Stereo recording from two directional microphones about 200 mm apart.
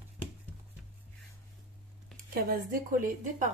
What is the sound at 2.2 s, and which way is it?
Speech, 45° right (ahead or behind).